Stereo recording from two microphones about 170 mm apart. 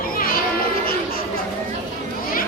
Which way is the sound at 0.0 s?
60° left (ahead or behind).